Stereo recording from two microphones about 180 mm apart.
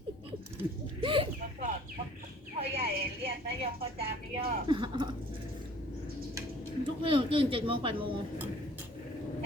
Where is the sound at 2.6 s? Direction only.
35° right (ahead or behind).